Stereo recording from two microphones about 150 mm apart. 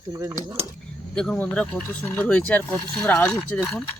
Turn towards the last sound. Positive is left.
turn(degrees=5)  # may be behind; listen again after turning